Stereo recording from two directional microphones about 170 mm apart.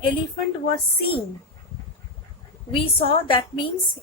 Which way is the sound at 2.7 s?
30° left (ahead or behind).